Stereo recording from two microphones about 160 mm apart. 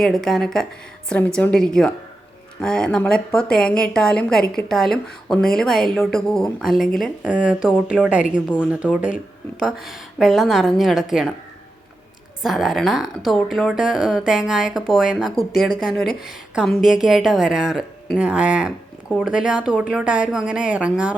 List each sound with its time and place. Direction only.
0.0 s speech: centre (ahead or behind)
12.4 s speech: centre (ahead or behind)